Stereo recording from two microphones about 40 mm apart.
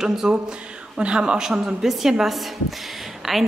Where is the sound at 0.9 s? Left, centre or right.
Right.